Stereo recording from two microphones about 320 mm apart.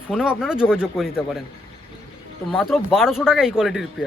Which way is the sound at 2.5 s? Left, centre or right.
Centre.